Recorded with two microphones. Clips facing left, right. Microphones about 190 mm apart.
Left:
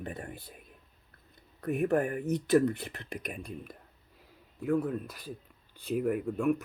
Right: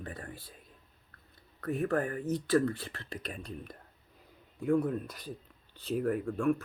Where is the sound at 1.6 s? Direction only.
20° left (ahead or behind).